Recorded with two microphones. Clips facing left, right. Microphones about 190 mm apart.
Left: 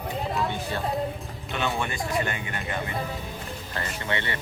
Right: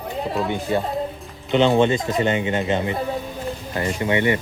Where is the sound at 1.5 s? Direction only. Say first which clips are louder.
Right 13 dB; 20° right (ahead or behind).